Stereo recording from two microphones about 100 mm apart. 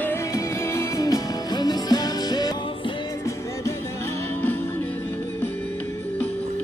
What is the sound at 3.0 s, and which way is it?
Music, 30° left (ahead or behind).